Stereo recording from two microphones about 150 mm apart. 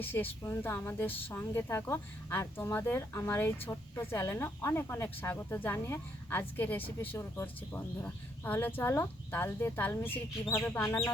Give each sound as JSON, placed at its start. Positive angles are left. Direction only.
{"t": 0.0, "sound": "a woman's voice", "side_deg": 15}